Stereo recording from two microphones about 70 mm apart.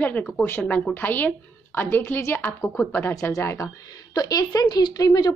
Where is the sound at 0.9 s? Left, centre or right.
Left.